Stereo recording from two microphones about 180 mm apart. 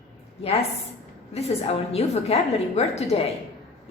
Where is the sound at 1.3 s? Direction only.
35° left (ahead or behind).